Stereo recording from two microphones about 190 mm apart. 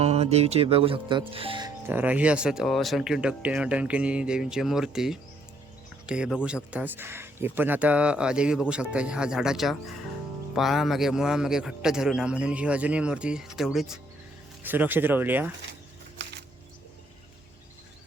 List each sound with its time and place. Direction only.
0.0 s speech: 35° right (ahead or behind)
1.9 s speech: 10° right (ahead or behind)